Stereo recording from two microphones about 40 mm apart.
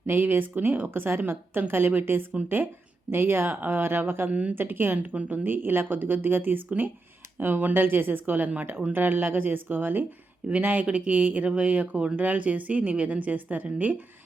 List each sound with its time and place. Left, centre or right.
0.1 s a woman's voice: right
3.1 s speech: right
4.3 s a woman's voice: right
4.5 s a woman's voice: right
7.3 s speech: right
7.9 s a woman's voice: right
10.5 s speech: right
10.8 s a woman's voice: right
11.1 s a woman's voice: right
11.9 s speech: right
12.2 s a woman's voice: right